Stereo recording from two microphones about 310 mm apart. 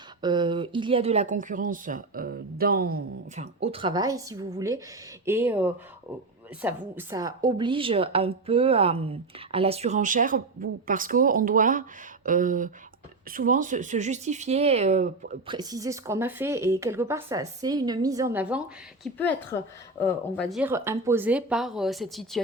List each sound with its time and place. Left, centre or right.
0.2 s a woman's voice: centre
15.5 s speech: centre
19.1 s speech: centre